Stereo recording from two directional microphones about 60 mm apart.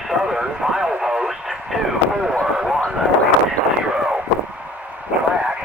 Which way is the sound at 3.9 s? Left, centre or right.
Centre.